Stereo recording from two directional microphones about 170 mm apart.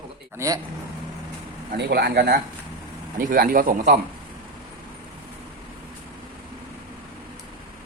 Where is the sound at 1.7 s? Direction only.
70° right (ahead or behind).